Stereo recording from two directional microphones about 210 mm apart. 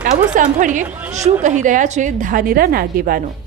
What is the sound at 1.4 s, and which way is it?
A woman's voice, 35° right (ahead or behind).